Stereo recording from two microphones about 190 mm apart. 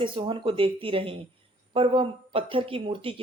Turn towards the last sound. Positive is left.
turn(degrees=-30)  # may be behind; listen again after turning